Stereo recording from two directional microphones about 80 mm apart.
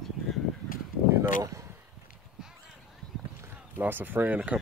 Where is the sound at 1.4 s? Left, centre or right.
Right.